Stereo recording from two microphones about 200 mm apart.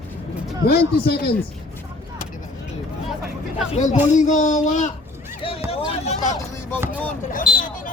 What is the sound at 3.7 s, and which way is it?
Speech, 35° left (ahead or behind).